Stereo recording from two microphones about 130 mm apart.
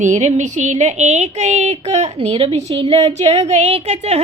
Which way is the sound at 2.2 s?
50° right (ahead or behind).